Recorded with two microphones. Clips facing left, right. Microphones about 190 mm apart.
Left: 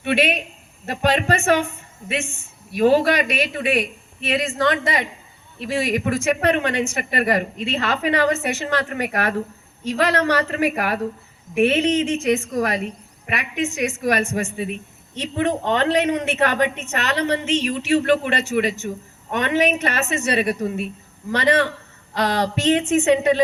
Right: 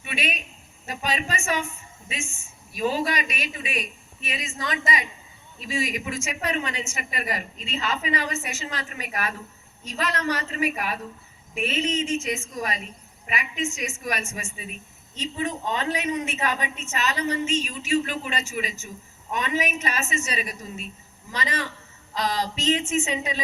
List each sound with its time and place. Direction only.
0.0 s a man's voice: 65° left (ahead or behind)